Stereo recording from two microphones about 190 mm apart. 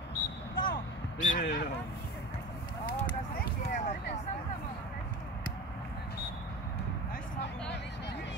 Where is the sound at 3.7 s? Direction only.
40° left (ahead or behind).